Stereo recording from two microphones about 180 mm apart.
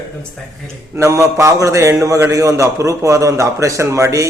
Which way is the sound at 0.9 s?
15° right (ahead or behind).